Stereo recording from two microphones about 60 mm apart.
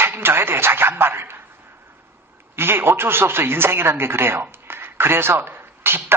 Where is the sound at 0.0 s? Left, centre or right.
Right.